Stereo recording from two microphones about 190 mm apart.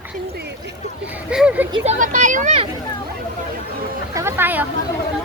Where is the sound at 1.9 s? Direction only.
40° right (ahead or behind).